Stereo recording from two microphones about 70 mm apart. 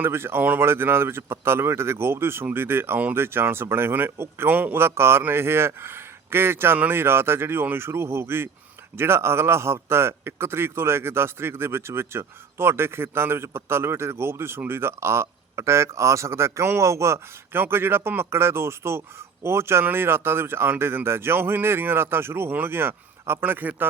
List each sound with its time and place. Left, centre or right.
0.0 s a man's voice: right